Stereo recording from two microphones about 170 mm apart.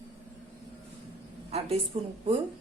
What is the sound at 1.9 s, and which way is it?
Speech, 40° right (ahead or behind).